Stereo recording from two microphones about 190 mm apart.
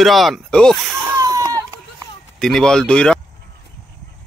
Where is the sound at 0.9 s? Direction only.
15° right (ahead or behind).